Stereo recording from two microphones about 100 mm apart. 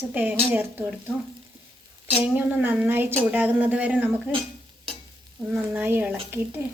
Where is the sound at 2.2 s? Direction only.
20° right (ahead or behind).